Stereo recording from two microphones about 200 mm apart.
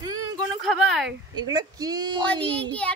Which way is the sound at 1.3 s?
20° right (ahead or behind).